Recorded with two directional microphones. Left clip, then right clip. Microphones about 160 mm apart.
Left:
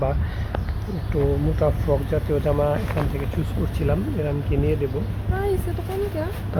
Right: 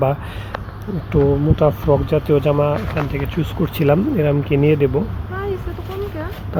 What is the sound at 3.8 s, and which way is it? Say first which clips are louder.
Speech: right 10 dB; 50° right (ahead or behind).